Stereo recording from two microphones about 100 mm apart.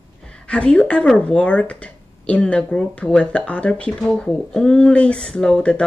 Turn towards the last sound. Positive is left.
turn(degrees=10)  # may be behind; listen again after turning